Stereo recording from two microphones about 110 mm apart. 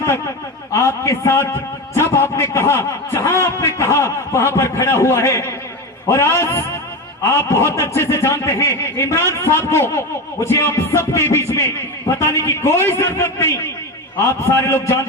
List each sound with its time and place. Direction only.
0.7 s speech: 25° left (ahead or behind)